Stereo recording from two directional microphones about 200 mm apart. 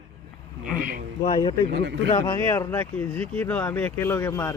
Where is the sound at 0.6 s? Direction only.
45° right (ahead or behind).